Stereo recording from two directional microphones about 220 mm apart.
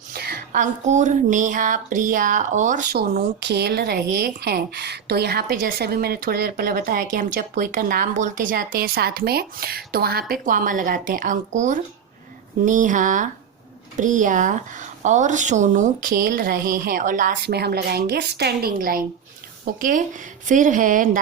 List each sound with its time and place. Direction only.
0.1 s speech: 45° right (ahead or behind)